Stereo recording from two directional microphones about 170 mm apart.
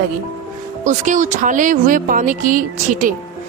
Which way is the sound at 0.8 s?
45° right (ahead or behind).